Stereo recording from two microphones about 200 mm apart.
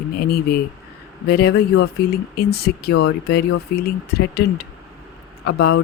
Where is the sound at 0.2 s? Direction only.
50° left (ahead or behind).